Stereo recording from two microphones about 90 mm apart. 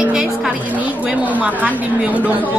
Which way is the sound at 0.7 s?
20° right (ahead or behind).